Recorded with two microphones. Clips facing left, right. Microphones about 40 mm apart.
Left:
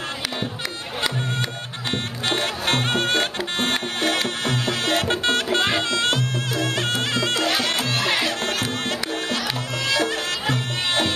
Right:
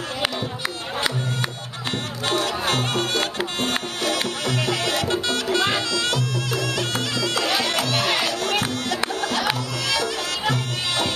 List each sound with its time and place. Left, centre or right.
1.9 s music: left